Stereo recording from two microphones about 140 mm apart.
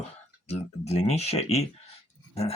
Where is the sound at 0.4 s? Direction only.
50° left (ahead or behind).